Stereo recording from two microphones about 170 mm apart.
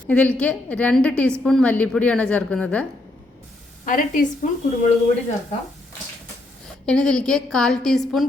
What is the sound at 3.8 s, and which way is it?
Speech, 55° left (ahead or behind).